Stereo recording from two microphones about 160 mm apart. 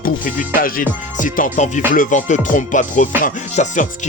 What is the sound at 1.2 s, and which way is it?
Music, 55° left (ahead or behind).